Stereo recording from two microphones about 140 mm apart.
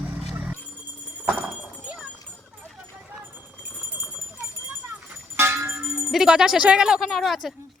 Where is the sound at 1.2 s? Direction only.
10° right (ahead or behind).